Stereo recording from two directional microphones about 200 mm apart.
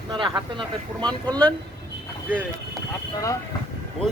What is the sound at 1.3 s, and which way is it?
Speech, 5° left (ahead or behind).